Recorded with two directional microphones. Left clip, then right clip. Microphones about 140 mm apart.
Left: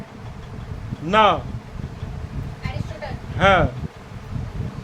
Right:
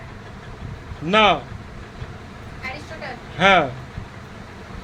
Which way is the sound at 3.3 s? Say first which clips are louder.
Right 1 dB; centre (ahead or behind).